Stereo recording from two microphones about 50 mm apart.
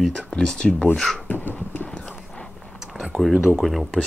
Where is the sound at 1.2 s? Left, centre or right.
Left.